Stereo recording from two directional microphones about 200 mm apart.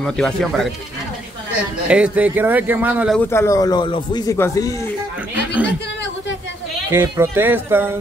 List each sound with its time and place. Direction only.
0.0 s speech: 5° left (ahead or behind)
1.9 s speech: 5° right (ahead or behind)
3.2 s speech: 10° left (ahead or behind)
6.9 s speech: 10° right (ahead or behind)